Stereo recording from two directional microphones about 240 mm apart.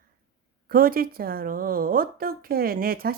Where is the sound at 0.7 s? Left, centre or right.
Right.